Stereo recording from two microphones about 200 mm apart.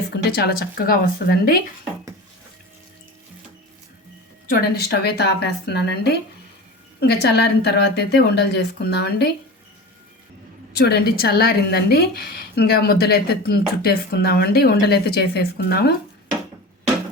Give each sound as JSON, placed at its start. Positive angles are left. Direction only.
{"t": 0.1, "sound": "a woman's voice", "side_deg": 55}
{"t": 4.4, "sound": "a woman's voice", "side_deg": 50}
{"t": 10.8, "sound": "a woman's voice", "side_deg": 50}